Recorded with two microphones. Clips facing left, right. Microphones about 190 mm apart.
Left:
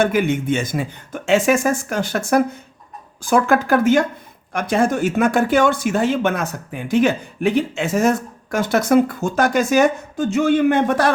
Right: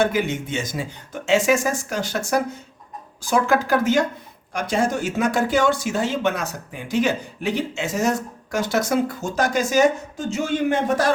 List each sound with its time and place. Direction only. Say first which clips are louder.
0.0 s speech: left 4 dB; 55° left (ahead or behind)